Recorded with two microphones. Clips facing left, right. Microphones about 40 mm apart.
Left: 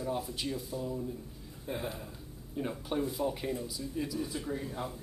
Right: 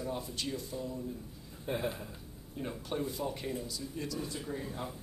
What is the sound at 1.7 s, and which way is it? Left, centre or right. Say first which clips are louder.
Speech: right 2 dB; right.